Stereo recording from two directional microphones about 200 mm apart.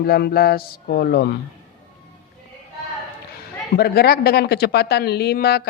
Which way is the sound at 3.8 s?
50° left (ahead or behind).